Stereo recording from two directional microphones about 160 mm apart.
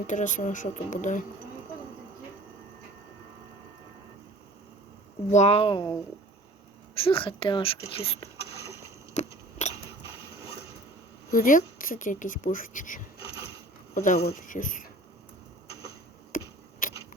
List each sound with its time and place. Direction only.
0.1 s speech: 50° left (ahead or behind)
5.3 s speech: 45° left (ahead or behind)
6.9 s speech: 35° left (ahead or behind)
8.6 s rowboat: 15° right (ahead or behind)
9.1 s a sound: 45° left (ahead or behind)
11.3 s speech: 60° left (ahead or behind)
16.3 s a sound: 55° left (ahead or behind)